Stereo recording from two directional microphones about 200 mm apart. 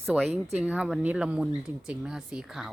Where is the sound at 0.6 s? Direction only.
5° right (ahead or behind).